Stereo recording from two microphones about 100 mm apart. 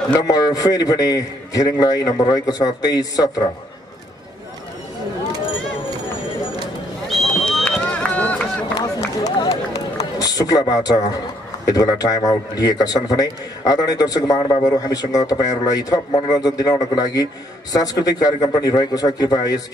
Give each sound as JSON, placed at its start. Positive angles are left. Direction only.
{"t": 0.3, "sound": "a man's voice", "side_deg": 40}
{"t": 7.1, "sound": "a sound", "side_deg": 0}
{"t": 7.6, "sound": "run", "side_deg": 10}
{"t": 8.7, "sound": "run", "side_deg": 40}
{"t": 11.6, "sound": "a man's voice", "side_deg": 40}